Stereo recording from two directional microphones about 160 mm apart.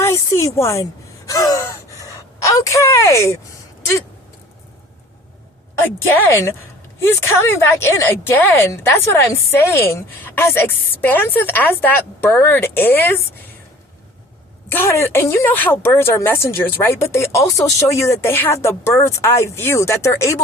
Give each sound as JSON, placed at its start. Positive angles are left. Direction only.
{"t": 0.0, "sound": "a sound", "side_deg": 20}
{"t": 1.3, "sound": "gasp", "side_deg": 20}
{"t": 2.4, "sound": "speech", "side_deg": 20}
{"t": 5.8, "sound": "a woman's voice", "side_deg": 10}
{"t": 7.8, "sound": "a woman's voice", "side_deg": 15}
{"t": 14.7, "sound": "a woman's voice", "side_deg": 15}